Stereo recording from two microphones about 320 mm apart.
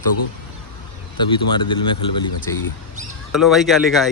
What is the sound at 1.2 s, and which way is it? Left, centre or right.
Speech, centre.